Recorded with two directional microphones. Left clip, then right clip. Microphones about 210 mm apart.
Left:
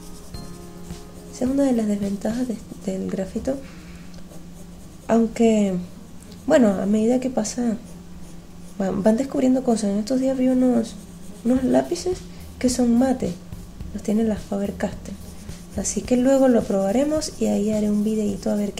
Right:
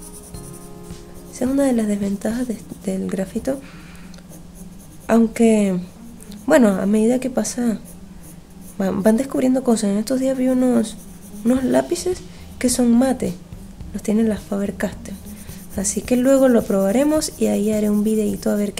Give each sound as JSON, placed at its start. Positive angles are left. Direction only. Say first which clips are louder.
{"t": 1.4, "sound": "a woman's voice", "louder": "right 2 dB", "side_deg": -10}
{"t": 5.0, "sound": "a woman's voice", "louder": "right 2 dB", "side_deg": -10}
{"t": 8.7, "sound": "a woman's voice", "louder": "right 2 dB", "side_deg": -10}